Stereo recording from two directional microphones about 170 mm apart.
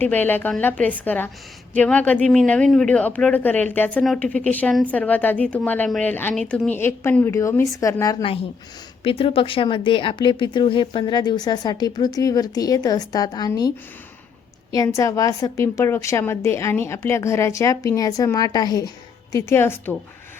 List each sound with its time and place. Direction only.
0.0 s speech: 10° left (ahead or behind)